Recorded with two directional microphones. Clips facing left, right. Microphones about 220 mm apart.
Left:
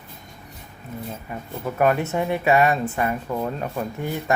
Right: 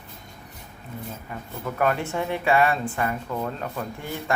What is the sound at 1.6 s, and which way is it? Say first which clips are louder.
Speech: left 4 dB; 15° left (ahead or behind).